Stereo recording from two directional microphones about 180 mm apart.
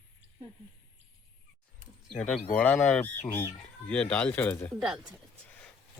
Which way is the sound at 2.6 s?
5° left (ahead or behind).